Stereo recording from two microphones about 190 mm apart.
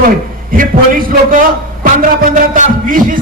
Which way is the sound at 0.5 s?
50° right (ahead or behind).